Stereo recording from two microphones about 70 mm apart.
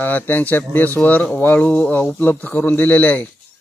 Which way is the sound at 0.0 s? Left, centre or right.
Left.